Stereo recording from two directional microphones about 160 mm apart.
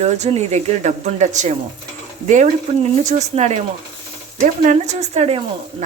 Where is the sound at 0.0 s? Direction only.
45° right (ahead or behind).